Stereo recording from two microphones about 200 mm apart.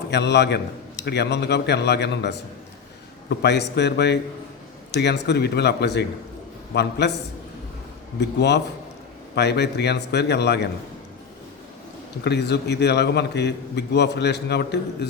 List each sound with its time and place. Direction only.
0.1 s a man's voice: 60° left (ahead or behind)
8.2 s a man's voice: 55° left (ahead or behind)
12.2 s a man's voice: 55° left (ahead or behind)